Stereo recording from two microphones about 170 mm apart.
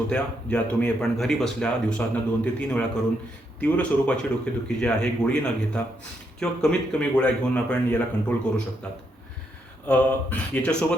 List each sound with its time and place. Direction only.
0.1 s speech: 5° left (ahead or behind)
9.8 s speech: 10° left (ahead or behind)